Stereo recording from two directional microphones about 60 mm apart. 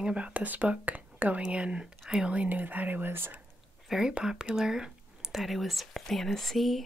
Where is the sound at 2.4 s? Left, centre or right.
Right.